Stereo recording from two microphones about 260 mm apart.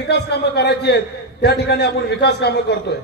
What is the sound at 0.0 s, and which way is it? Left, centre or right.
A man's voice, left.